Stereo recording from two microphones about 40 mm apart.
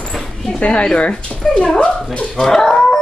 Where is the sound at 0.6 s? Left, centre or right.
Left.